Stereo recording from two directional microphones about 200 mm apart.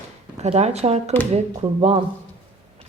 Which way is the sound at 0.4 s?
35° right (ahead or behind).